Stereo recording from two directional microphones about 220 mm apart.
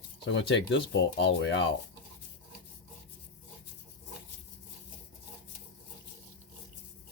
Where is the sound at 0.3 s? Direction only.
55° left (ahead or behind).